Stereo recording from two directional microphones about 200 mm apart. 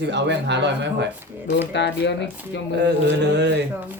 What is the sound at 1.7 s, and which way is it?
Speech, 60° left (ahead or behind).